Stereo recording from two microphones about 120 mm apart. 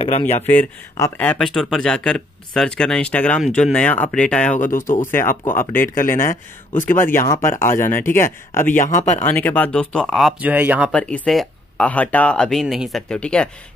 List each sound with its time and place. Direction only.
0.9 s speech: 25° left (ahead or behind)
1.4 s speech: 5° left (ahead or behind)
4.6 s speech: 90° left
5.1 s speech: 20° left (ahead or behind)
8.7 s speech: 90° left
9.2 s speech: 15° left (ahead or behind)
10.4 s speech: 15° right (ahead or behind)
10.9 s speech: 10° left (ahead or behind)
13.1 s speech: 10° left (ahead or behind)